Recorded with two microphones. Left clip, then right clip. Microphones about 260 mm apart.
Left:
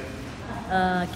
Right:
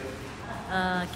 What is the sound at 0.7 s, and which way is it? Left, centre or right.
Speech, centre.